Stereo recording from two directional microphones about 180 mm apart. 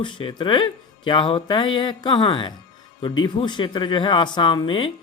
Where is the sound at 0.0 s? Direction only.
25° left (ahead or behind).